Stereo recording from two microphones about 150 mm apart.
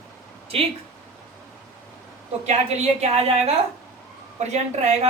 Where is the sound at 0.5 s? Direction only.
40° right (ahead or behind).